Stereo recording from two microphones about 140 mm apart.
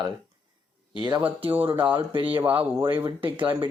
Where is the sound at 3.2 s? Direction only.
35° right (ahead or behind).